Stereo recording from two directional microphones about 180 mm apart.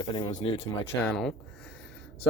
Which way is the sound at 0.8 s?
10° left (ahead or behind).